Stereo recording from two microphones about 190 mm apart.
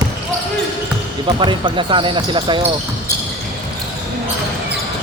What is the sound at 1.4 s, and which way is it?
Speech, 25° right (ahead or behind).